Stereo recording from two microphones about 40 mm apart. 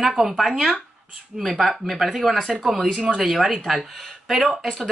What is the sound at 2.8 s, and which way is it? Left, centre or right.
Speech, right.